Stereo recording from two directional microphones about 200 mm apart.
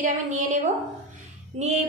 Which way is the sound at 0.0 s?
40° right (ahead or behind).